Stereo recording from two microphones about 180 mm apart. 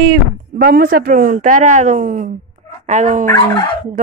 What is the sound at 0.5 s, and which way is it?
Speech, 55° right (ahead or behind).